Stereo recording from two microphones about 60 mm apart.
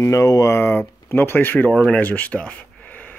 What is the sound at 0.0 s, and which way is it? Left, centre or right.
Speech, left.